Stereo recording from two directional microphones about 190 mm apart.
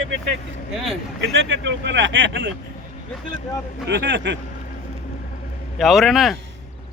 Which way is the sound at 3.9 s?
70° right (ahead or behind).